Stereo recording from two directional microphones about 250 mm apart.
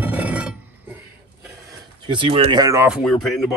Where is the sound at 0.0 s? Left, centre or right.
Centre.